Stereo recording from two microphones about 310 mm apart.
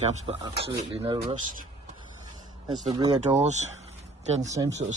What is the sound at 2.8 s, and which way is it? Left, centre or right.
Speech, centre.